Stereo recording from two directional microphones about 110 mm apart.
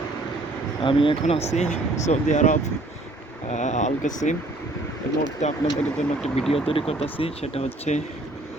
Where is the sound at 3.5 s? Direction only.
90° left.